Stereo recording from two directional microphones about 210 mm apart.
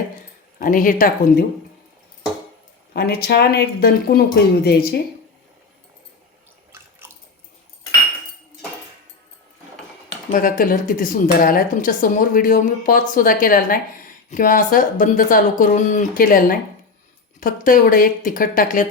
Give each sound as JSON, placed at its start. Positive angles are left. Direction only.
{"t": 0.6, "sound": "speech", "side_deg": 40}
{"t": 2.9, "sound": "speech", "side_deg": 50}
{"t": 10.3, "sound": "speech", "side_deg": 40}